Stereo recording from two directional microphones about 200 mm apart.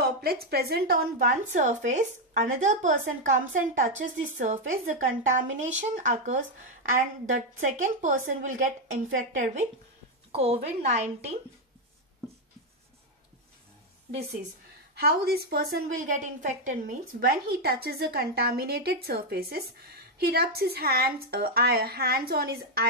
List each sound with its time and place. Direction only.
0.0 s a woman's voice: 50° right (ahead or behind); by 11.1 s 35° right (ahead or behind)
15.0 s a woman's voice: 50° right (ahead or behind)
17.2 s a woman's voice: 50° right (ahead or behind)